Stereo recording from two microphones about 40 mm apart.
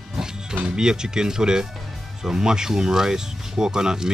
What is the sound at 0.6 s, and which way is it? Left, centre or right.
Speech, centre.